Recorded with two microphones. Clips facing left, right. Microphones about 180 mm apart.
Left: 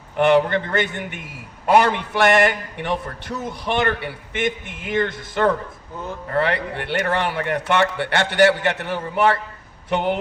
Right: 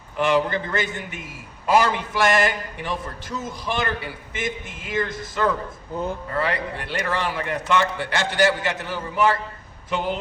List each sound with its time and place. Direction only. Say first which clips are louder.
0.2 s a man's voice: left 5 dB; 60° left (ahead or behind)